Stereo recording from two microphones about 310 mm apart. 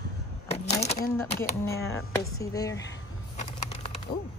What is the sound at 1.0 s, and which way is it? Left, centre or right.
Speech, centre.